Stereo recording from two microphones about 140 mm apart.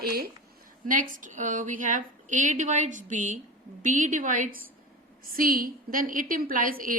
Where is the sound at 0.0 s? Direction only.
90° right.